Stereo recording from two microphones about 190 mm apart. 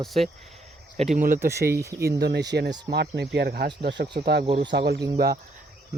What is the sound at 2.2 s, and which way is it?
Speech, 60° right (ahead or behind).